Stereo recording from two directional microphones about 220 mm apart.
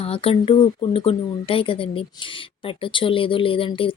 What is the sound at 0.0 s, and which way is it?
Speech, 25° left (ahead or behind).